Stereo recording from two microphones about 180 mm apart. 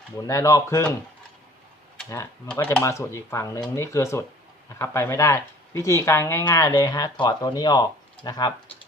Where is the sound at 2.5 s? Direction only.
10° left (ahead or behind).